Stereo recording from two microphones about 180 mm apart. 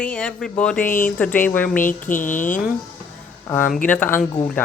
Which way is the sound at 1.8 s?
45° left (ahead or behind).